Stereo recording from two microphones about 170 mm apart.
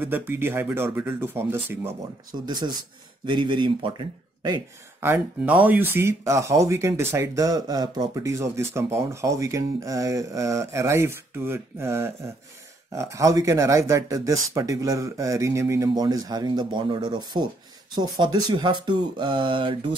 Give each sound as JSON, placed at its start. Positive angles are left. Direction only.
{"t": 0.0, "sound": "speech", "side_deg": -10}
{"t": 2.3, "sound": "speech", "side_deg": -25}
{"t": 5.0, "sound": "speech", "side_deg": -10}